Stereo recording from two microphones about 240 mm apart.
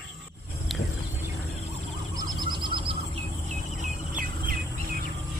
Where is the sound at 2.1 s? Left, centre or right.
Centre.